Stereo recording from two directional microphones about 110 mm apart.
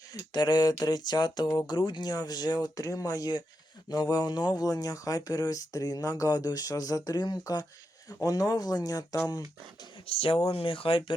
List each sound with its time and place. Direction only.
0.3 s speech: 40° left (ahead or behind)
10.1 s speech: 55° left (ahead or behind)